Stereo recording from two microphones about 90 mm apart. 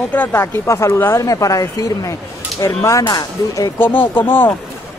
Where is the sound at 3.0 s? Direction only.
50° left (ahead or behind).